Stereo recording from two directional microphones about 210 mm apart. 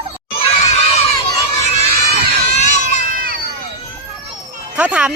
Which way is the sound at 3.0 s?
45° right (ahead or behind).